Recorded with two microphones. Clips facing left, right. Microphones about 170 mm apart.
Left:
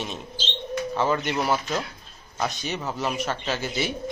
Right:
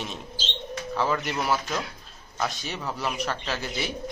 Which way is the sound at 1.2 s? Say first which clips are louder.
Left 3 dB; centre (ahead or behind).